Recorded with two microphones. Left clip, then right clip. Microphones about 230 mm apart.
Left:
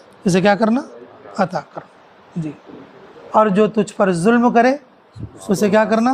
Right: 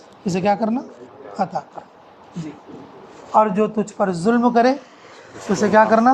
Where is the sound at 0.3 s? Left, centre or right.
Left.